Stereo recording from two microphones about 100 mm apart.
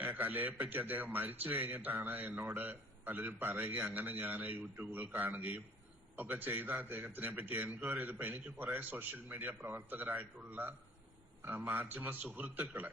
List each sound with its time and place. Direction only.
0.0 s a man's voice: 15° right (ahead or behind)